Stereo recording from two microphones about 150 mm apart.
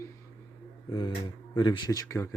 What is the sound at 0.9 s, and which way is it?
Speech, 35° left (ahead or behind).